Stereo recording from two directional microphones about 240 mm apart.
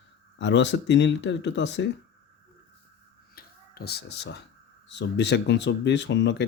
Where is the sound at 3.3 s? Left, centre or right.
Left.